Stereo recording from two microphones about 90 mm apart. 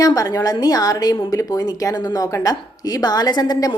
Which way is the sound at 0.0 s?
40° left (ahead or behind).